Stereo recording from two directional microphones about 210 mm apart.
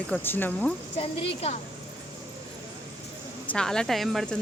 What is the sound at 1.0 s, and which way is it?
Speech, 30° left (ahead or behind).